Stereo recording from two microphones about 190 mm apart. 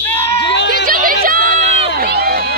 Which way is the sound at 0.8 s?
50° right (ahead or behind).